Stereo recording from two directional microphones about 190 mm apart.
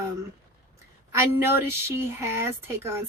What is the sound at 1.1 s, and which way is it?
Speech, 15° right (ahead or behind).